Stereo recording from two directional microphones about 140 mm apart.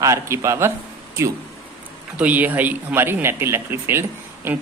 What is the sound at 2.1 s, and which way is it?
Speech, 10° right (ahead or behind).